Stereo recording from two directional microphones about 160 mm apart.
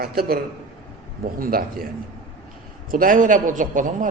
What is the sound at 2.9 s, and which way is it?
Speech, 60° right (ahead or behind).